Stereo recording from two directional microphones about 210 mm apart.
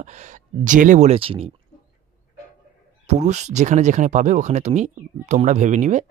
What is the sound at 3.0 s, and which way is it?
Speech, 35° right (ahead or behind).